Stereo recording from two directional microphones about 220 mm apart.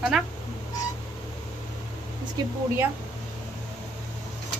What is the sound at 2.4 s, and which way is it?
Speech, 20° right (ahead or behind).